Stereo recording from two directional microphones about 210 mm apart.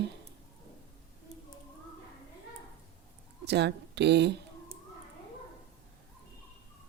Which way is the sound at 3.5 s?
55° right (ahead or behind).